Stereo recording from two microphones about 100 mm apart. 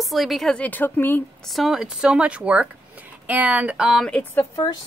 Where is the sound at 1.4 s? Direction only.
Centre (ahead or behind).